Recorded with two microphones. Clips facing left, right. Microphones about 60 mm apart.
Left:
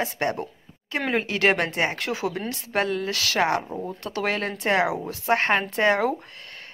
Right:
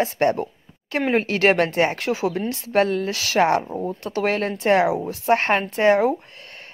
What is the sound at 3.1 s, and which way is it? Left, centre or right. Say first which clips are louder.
Speech: right 5 dB; right.